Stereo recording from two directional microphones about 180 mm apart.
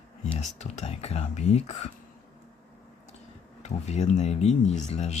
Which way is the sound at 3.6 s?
40° left (ahead or behind).